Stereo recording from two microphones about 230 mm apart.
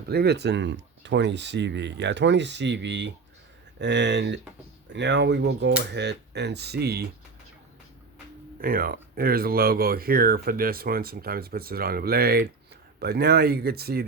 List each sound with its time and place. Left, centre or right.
0.1 s speech: right
8.6 s speech: right